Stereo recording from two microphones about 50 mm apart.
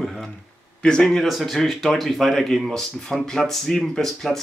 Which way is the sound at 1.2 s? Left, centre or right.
Centre.